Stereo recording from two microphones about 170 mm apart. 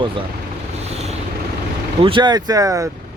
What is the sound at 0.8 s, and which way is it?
Vehicle, 40° right (ahead or behind).